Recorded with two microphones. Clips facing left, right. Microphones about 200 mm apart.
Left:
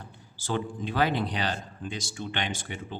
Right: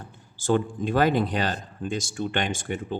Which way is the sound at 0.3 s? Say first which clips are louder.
Right 7 dB; 50° right (ahead or behind).